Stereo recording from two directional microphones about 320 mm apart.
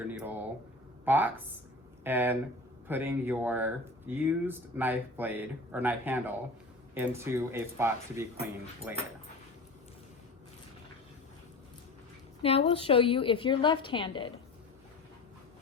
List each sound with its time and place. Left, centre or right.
0.1 s speech: centre
12.4 s a woman's voice: centre